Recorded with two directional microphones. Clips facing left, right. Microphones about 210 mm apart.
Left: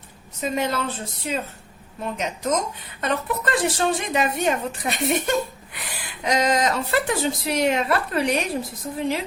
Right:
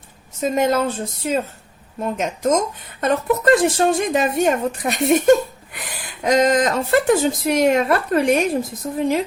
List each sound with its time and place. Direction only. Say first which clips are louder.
0.4 s speech: right 6 dB; 45° right (ahead or behind)